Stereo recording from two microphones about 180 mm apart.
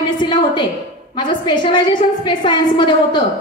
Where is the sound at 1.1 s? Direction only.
25° left (ahead or behind).